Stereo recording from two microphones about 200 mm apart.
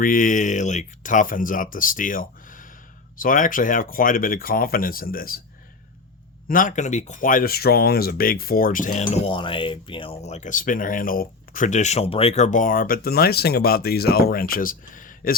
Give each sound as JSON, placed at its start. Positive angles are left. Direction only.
{"t": 0.0, "sound": "speech", "side_deg": 45}
{"t": 6.5, "sound": "speech", "side_deg": 40}